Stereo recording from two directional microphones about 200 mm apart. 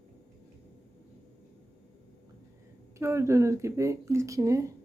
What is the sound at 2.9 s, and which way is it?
Speech, 15° right (ahead or behind).